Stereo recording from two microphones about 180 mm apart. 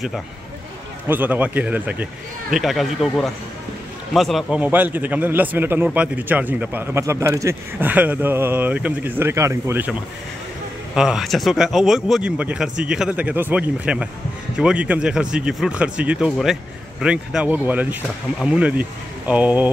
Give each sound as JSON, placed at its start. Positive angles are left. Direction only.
{"t": 1.0, "sound": "speech", "side_deg": -10}
{"t": 11.0, "sound": "speech", "side_deg": 0}